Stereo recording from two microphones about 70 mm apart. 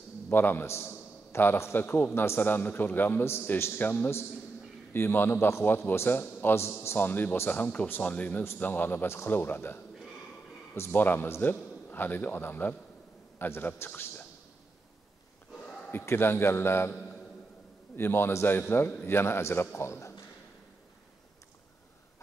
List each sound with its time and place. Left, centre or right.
0.3 s a man's voice: left
15.9 s a man's voice: left
16.9 s a sound: left
17.9 s a man's voice: left